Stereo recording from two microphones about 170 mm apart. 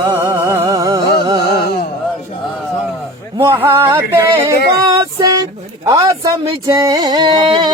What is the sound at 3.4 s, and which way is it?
Music, 15° right (ahead or behind).